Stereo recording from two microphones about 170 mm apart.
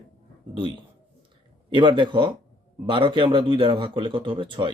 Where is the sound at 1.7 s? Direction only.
25° right (ahead or behind).